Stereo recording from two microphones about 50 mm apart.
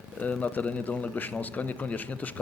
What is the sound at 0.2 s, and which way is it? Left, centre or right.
A man's voice, left.